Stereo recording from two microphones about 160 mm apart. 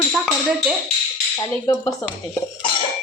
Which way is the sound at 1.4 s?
20° left (ahead or behind).